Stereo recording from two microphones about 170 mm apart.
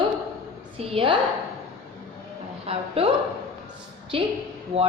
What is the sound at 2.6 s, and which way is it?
Speech, 35° right (ahead or behind).